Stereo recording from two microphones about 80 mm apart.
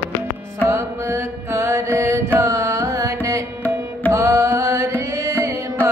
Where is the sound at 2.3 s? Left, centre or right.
Right.